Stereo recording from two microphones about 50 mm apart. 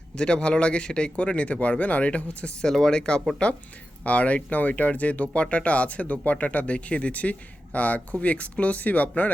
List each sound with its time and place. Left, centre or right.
0.2 s speech: centre
2.6 s speech: centre
4.0 s speech: left